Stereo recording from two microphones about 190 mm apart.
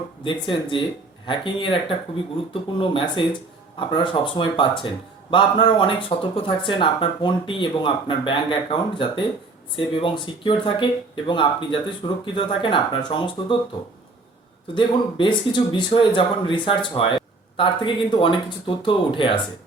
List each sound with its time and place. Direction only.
0.3 s speech: 25° left (ahead or behind)
14.8 s speech: 25° left (ahead or behind)